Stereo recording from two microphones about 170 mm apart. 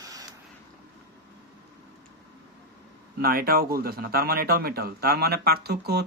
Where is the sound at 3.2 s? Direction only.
60° right (ahead or behind).